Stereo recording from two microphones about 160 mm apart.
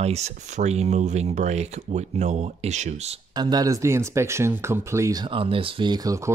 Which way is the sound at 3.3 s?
25° right (ahead or behind).